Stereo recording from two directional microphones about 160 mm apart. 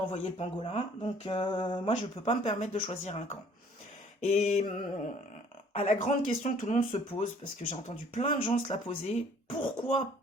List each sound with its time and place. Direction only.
0.1 s speech: 45° left (ahead or behind)
0.6 s speech: 35° left (ahead or behind)
1.9 s speech: 45° left (ahead or behind)